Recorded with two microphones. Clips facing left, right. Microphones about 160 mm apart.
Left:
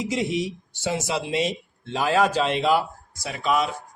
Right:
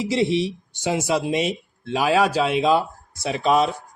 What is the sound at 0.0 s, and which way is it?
Speech, 30° right (ahead or behind).